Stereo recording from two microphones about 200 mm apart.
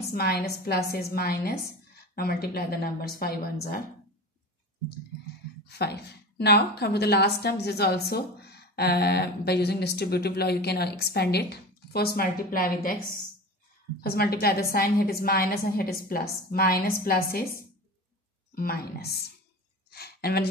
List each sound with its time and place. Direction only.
0.1 s a woman's voice: 50° left (ahead or behind)
5.7 s a woman's voice: 55° left (ahead or behind)
18.5 s a woman's voice: 45° left (ahead or behind)